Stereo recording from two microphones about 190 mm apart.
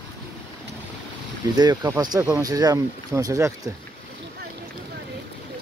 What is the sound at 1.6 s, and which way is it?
Speech, 20° right (ahead or behind).